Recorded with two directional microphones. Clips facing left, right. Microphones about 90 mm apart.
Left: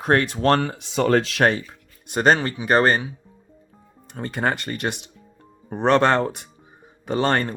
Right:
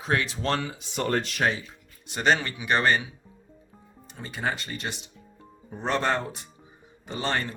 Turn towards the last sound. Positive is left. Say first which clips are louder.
# left 8 dB
turn(degrees=50)  # may be behind; listen again after turning